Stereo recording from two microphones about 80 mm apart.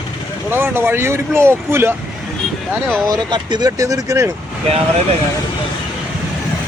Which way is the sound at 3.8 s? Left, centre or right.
Right.